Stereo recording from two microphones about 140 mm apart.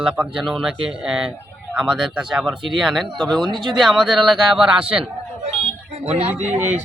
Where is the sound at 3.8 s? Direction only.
5° right (ahead or behind).